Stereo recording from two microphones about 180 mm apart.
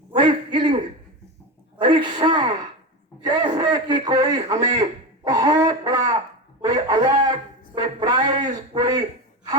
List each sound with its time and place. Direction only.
0.1 s throat clearing: 25° right (ahead or behind)
1.8 s a man's voice: 25° right (ahead or behind)